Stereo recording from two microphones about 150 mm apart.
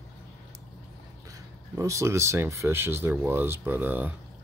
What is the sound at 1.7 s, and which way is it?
Speech, 20° right (ahead or behind).